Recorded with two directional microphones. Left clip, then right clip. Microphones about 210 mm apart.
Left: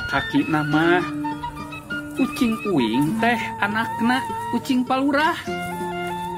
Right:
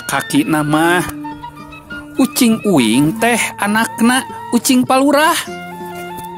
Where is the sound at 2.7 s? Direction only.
55° right (ahead or behind).